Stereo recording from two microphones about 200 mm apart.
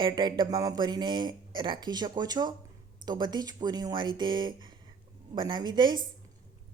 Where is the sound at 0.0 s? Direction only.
25° right (ahead or behind).